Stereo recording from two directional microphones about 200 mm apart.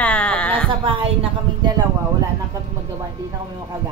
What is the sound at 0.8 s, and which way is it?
Speech, 25° right (ahead or behind).